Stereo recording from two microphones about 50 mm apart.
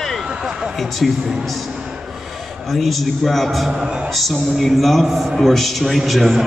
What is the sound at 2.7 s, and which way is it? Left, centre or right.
A man's voice, centre.